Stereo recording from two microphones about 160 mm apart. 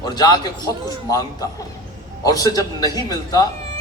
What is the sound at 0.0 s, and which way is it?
Speech, 25° left (ahead or behind).